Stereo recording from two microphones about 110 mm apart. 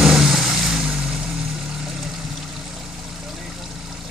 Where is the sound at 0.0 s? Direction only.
5° right (ahead or behind).